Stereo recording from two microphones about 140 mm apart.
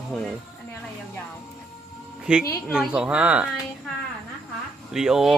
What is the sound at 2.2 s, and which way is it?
A woman's voice, 5° right (ahead or behind).